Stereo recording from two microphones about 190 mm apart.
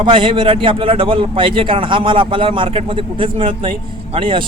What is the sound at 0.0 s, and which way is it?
A man's voice, 25° right (ahead or behind).